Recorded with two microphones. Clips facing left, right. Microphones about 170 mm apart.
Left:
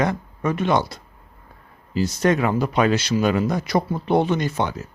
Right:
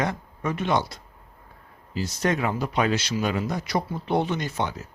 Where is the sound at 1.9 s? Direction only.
65° left (ahead or behind).